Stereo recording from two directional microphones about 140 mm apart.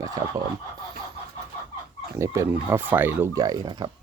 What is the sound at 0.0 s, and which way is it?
Speech, 25° right (ahead or behind).